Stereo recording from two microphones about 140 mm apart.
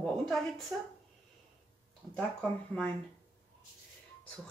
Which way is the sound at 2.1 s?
Centre (ahead or behind).